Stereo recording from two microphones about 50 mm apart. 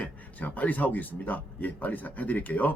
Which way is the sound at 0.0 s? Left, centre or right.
Left.